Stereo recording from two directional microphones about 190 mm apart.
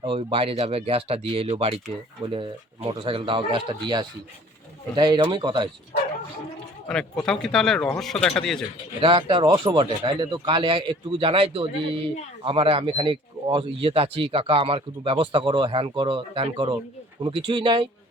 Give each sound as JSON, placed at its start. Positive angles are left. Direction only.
{"t": 0.0, "sound": "speech", "side_deg": -30}
{"t": 7.3, "sound": "speech", "side_deg": 0}
{"t": 9.0, "sound": "speech", "side_deg": -25}